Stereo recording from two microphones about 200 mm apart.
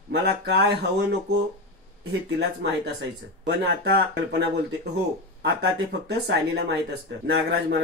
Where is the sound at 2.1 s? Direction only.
60° right (ahead or behind).